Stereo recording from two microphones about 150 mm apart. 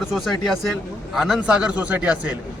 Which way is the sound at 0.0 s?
Centre (ahead or behind).